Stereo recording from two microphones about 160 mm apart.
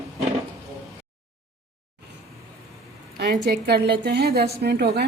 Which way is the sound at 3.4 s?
90° right.